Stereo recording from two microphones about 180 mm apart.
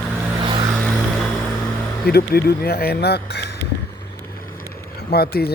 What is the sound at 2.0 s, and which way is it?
Speech, 60° left (ahead or behind).